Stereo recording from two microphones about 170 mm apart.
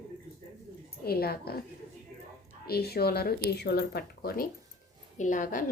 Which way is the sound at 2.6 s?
65° left (ahead or behind).